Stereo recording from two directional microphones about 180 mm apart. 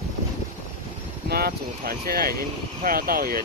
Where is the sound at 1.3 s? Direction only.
60° right (ahead or behind).